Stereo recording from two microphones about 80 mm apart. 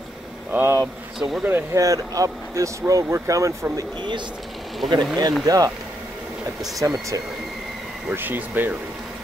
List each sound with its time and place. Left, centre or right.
0.5 s speech: right
1.2 s speech: centre
1.5 s speech: right
4.8 s speech: right
5.4 s speech: right
6.8 s speech: right
8.1 s speech: right